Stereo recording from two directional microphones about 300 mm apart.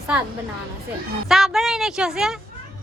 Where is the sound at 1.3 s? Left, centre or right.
Centre.